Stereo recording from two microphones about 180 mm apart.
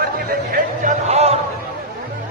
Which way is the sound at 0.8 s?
40° right (ahead or behind).